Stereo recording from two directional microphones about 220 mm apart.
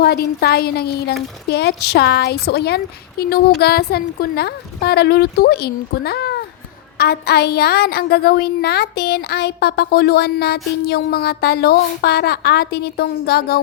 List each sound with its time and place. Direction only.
0.0 s a woman's voice: 45° left (ahead or behind)